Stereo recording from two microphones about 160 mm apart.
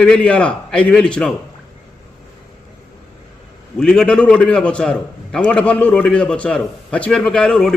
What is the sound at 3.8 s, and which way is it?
A man's voice, 5° left (ahead or behind).